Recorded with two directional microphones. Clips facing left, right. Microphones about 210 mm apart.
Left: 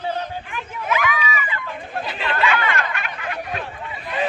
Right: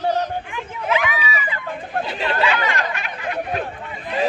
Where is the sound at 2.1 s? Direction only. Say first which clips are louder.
Even; 35° right (ahead or behind).